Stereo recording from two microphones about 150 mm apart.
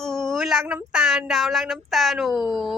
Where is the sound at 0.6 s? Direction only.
5° right (ahead or behind).